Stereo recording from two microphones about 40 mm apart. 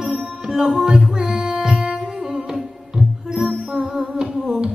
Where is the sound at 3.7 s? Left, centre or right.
Right.